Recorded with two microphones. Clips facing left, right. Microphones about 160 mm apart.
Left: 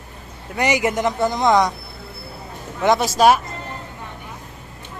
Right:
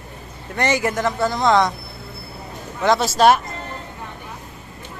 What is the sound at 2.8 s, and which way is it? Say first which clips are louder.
Speech: even; 15° left (ahead or behind).